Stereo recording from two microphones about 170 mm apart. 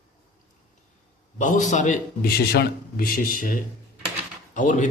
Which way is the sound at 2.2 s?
70° left (ahead or behind).